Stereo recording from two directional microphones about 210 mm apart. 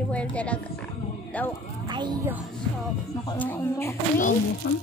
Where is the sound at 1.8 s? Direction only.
20° right (ahead or behind).